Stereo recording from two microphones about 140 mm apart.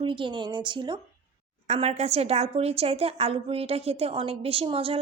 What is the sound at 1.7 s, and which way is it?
A woman's voice, 50° right (ahead or behind).